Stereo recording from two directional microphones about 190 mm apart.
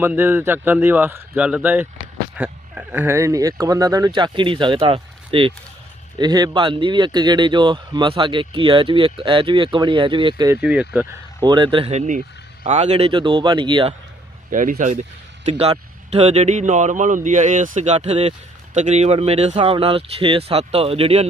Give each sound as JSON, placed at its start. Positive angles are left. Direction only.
{"t": 0.0, "sound": "speech", "side_deg": -10}
{"t": 10.6, "sound": "speech", "side_deg": -5}
{"t": 11.3, "sound": "speech", "side_deg": -25}
{"t": 14.5, "sound": "speech", "side_deg": -45}
{"t": 15.4, "sound": "speech", "side_deg": -30}